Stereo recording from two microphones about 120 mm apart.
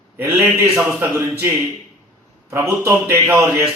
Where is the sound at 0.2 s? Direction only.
20° right (ahead or behind).